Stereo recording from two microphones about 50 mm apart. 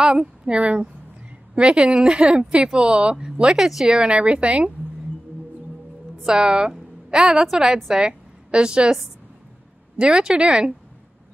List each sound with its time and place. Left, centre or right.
0.0 s speech: centre
4.0 s speech: right
6.2 s a woman's voice: centre